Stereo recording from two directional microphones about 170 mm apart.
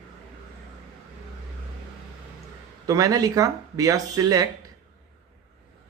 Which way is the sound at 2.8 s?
20° right (ahead or behind).